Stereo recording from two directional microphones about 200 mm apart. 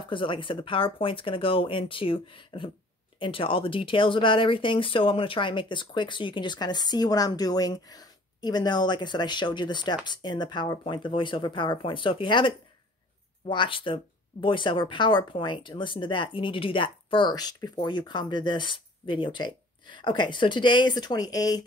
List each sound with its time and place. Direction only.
0.1 s speech: 25° left (ahead or behind)